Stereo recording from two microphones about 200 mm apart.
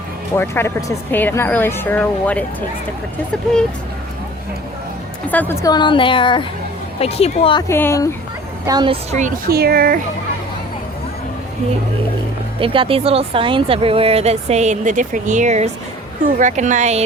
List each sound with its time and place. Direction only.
0.3 s speech: 10° left (ahead or behind)
5.3 s speech: 10° left (ahead or behind)
5.7 s a woman's voice: 25° left (ahead or behind)
7.7 s speech: 15° left (ahead or behind)
8.6 s speech: 20° right (ahead or behind)
9.1 s a woman's voice: 45° right (ahead or behind)
12.5 s speech: 25° right (ahead or behind)